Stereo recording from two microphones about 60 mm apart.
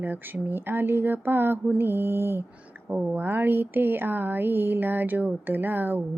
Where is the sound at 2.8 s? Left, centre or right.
Right.